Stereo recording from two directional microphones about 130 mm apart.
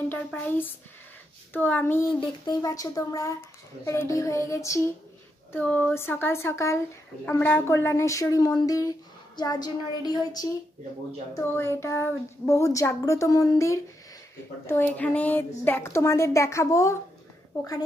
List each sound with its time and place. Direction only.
0.1 s speech: 15° left (ahead or behind)
2.1 s speech: 30° left (ahead or behind)
5.5 s a woman's voice: 15° left (ahead or behind); by 10.5 s 30° left (ahead or behind)
11.3 s speech: 20° left (ahead or behind)
14.7 s speech: 15° left (ahead or behind)